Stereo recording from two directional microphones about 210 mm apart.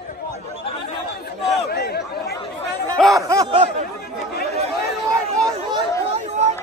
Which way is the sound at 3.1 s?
15° right (ahead or behind).